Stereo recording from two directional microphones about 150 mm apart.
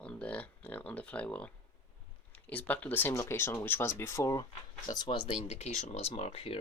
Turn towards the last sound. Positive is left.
turn(degrees=40)  # may be behind; listen again after turning